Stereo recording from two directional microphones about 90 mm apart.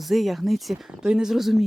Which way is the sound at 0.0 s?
Centre (ahead or behind).